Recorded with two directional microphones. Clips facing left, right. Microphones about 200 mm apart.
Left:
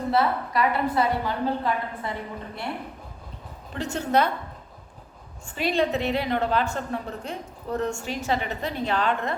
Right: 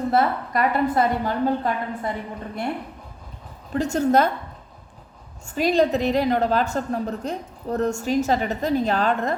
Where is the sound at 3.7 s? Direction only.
40° right (ahead or behind).